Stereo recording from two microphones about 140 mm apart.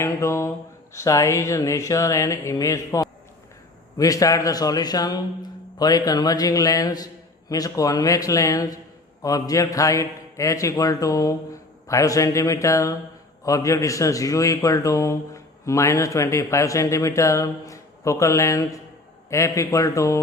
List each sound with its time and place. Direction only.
0.0 s a man's voice: 20° left (ahead or behind)